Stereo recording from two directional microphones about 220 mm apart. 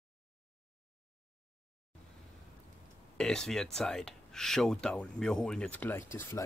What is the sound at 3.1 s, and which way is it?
Speech, 5° left (ahead or behind).